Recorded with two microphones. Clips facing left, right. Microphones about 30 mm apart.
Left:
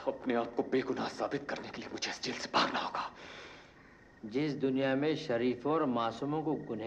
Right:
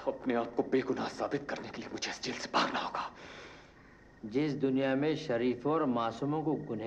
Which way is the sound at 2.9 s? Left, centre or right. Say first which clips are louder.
Even; left.